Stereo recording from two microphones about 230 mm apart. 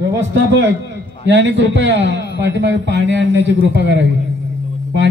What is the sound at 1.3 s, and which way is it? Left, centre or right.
A man's voice, right.